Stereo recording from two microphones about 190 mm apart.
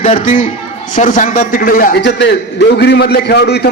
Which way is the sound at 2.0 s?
65° left (ahead or behind).